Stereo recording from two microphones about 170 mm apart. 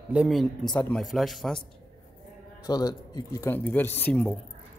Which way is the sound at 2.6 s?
25° left (ahead or behind).